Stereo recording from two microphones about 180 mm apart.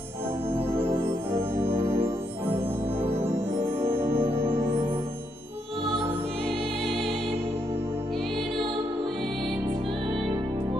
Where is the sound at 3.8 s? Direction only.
15° right (ahead or behind).